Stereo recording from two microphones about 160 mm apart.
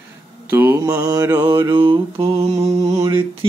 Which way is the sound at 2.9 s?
20° right (ahead or behind).